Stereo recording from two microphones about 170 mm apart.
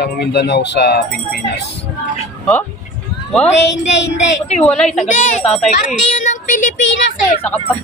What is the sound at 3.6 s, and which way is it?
Speech, 90° left.